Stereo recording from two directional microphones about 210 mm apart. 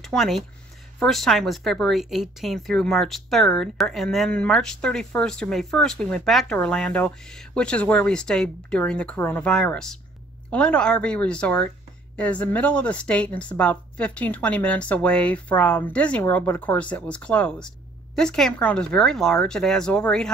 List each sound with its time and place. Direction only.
0.0 s speech: centre (ahead or behind)